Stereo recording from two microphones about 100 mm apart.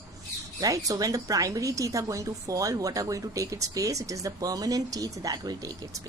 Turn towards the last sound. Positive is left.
turn(degrees=-40)  # may be behind; listen again after turning